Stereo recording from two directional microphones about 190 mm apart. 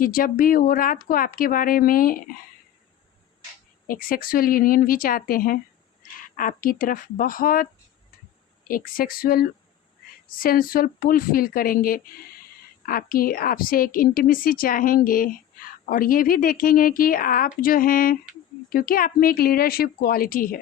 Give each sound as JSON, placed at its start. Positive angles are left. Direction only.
{"t": 0.0, "sound": "a woman's voice", "side_deg": 50}
{"t": 3.8, "sound": "a woman's voice", "side_deg": 50}